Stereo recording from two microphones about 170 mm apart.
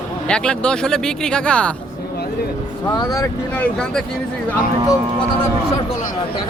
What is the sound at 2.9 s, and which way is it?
Speech, 20° left (ahead or behind).